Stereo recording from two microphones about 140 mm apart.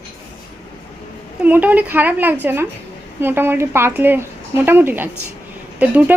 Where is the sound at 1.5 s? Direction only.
10° right (ahead or behind).